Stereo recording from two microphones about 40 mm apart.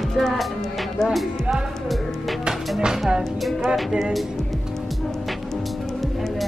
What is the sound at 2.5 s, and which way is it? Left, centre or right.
Music, centre.